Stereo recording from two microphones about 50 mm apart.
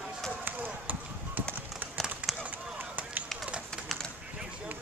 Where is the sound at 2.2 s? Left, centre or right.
Right.